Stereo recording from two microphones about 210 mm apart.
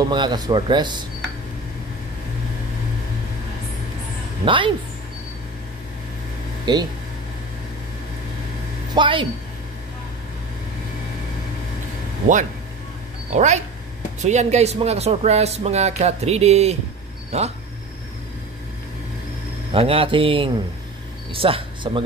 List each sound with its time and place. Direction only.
0.1 s speech: 20° right (ahead or behind)
4.5 s speech: 25° right (ahead or behind)
6.6 s speech: 20° right (ahead or behind)
8.9 s speech: 25° right (ahead or behind)
13.3 s speech: 35° right (ahead or behind)
19.7 s speech: 25° right (ahead or behind)